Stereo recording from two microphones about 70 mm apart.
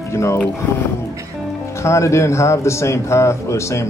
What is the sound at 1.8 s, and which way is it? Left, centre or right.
Speech, left.